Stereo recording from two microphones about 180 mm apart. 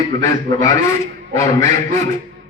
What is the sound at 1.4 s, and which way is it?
Speech, 20° left (ahead or behind).